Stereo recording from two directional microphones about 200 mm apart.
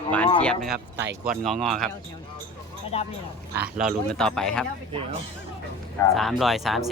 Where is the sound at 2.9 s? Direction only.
30° left (ahead or behind).